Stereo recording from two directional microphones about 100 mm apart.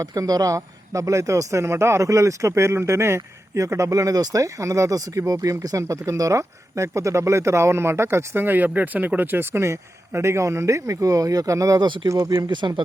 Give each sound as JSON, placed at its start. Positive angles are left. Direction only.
{"t": 0.0, "sound": "a man's voice", "side_deg": -35}